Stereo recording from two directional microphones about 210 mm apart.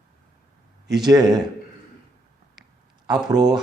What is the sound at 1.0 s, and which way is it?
Speech, 20° right (ahead or behind).